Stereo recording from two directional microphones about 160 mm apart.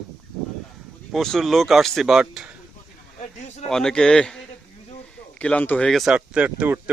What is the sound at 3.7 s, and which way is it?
Speech, 5° left (ahead or behind).